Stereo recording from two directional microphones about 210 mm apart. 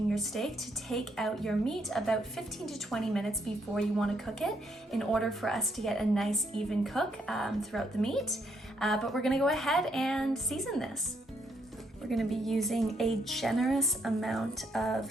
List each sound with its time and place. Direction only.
0.1 s speech: centre (ahead or behind)
12.0 s speech: centre (ahead or behind)